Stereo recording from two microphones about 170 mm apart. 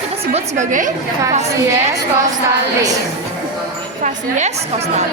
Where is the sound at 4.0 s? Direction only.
45° right (ahead or behind).